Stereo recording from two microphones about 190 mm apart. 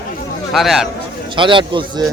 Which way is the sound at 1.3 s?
25° right (ahead or behind).